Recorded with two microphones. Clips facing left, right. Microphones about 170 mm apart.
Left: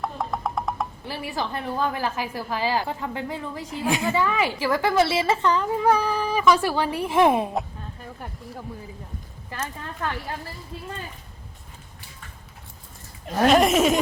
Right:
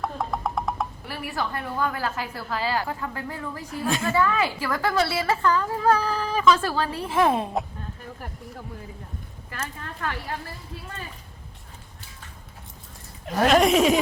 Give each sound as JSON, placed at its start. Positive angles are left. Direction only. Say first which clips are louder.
{"t": 0.0, "sound": "wood block", "louder": "even", "side_deg": 0}
{"t": 1.0, "sound": "a woman's voice", "louder": "left 1 dB", "side_deg": 25}
{"t": 13.5, "sound": "speech", "louder": "even", "side_deg": 0}